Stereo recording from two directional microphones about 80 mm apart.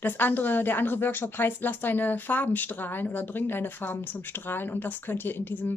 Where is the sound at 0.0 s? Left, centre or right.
Left.